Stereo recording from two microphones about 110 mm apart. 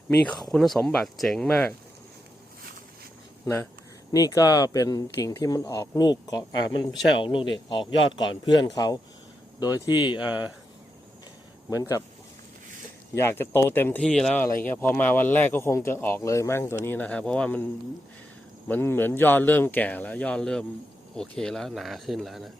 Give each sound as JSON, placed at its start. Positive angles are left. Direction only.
{"t": 0.5, "sound": "speech", "side_deg": 5}
{"t": 3.4, "sound": "speech", "side_deg": 25}
{"t": 11.7, "sound": "speech", "side_deg": 30}
{"t": 13.1, "sound": "speech", "side_deg": 20}
{"t": 14.6, "sound": "speech", "side_deg": 15}
{"t": 18.7, "sound": "speech", "side_deg": 20}